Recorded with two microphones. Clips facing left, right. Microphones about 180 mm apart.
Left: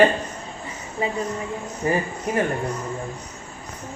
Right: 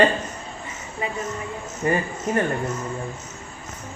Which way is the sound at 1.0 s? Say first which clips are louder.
Left 4 dB; 30° left (ahead or behind).